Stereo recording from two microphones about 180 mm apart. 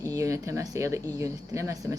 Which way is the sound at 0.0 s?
15° right (ahead or behind).